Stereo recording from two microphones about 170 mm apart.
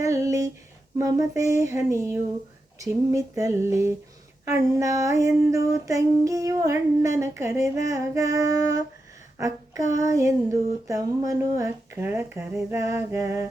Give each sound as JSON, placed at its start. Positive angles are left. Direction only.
{"t": 0.0, "sound": "a sound", "side_deg": -20}
{"t": 0.9, "sound": "female singing", "side_deg": -20}
{"t": 7.9, "sound": "music", "side_deg": -20}
{"t": 10.8, "sound": "female singing", "side_deg": -20}